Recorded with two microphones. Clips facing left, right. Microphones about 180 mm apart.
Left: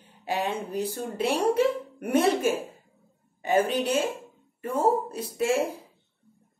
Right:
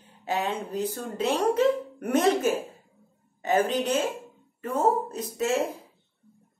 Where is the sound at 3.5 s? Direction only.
10° left (ahead or behind).